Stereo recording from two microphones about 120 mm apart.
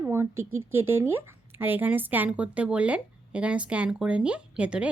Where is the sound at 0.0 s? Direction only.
20° right (ahead or behind).